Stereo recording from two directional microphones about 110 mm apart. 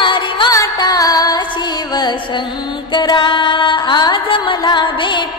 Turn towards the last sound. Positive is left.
turn(degrees=45)  # may be behind; listen again after turning